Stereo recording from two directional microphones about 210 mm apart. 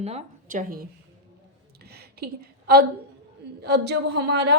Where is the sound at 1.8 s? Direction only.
50° right (ahead or behind).